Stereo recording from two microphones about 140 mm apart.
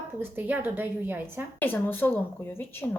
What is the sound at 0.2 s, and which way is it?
A woman's voice, 15° right (ahead or behind).